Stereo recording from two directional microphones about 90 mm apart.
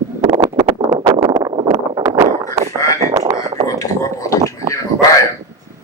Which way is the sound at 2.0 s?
40° right (ahead or behind).